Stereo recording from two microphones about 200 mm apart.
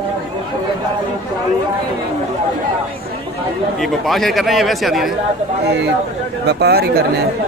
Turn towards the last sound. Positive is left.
turn(degrees=-50)  # may be behind; listen again after turning